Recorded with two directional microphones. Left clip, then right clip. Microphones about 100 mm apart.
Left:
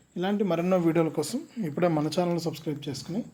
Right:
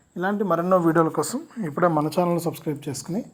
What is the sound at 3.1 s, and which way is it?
Speech, 80° right.